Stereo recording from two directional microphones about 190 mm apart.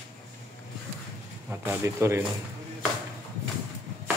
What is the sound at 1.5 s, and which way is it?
Speech, 15° right (ahead or behind).